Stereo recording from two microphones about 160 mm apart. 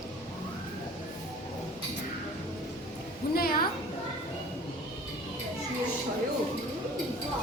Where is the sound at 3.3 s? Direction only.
70° left (ahead or behind).